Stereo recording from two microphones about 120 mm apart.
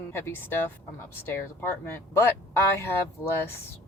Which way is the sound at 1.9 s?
15° left (ahead or behind).